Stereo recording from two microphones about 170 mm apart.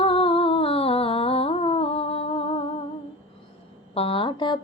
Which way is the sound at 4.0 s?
35° left (ahead or behind).